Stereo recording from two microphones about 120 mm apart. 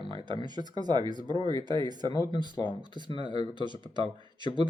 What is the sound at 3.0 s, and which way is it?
Speech, 40° left (ahead or behind).